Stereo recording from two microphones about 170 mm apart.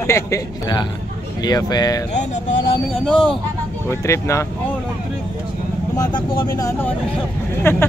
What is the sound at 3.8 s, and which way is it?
Speech, 15° left (ahead or behind).